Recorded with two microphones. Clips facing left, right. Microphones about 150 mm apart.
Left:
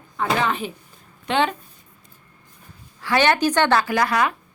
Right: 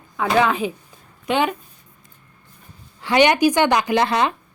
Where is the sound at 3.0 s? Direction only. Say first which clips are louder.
Right 3 dB; 15° right (ahead or behind).